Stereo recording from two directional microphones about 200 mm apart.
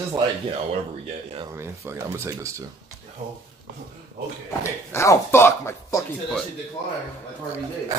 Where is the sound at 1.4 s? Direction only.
10° right (ahead or behind).